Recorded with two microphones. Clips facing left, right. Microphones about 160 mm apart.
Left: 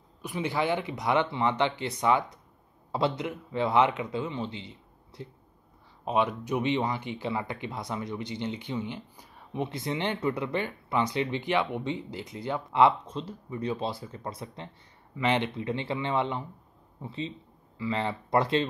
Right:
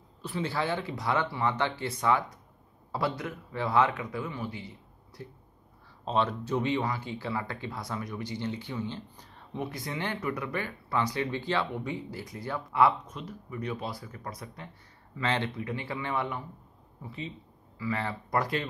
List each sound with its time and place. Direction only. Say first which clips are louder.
0.2 s speech: left 2 dB; 15° left (ahead or behind)